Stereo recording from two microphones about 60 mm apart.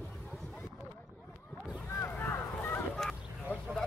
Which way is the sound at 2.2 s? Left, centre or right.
Left.